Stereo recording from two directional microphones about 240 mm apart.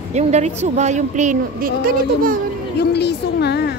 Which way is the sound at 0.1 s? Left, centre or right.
Right.